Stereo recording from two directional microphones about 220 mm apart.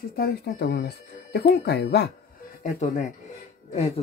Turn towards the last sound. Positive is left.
turn(degrees=30)  # may be behind; listen again after turning